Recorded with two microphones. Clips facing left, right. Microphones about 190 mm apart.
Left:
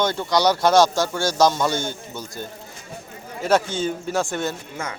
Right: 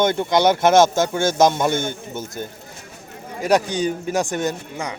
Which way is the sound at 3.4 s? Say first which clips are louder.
Right 2 dB; 15° right (ahead or behind).